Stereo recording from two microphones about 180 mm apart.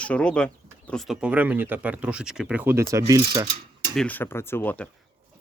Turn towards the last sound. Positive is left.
turn(degrees=10)  # may be behind; listen again after turning